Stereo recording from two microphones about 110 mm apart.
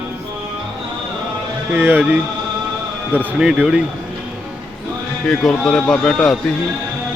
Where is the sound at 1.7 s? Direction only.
15° right (ahead or behind).